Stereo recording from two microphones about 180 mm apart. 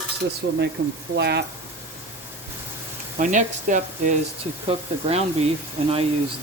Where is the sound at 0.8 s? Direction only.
90° right.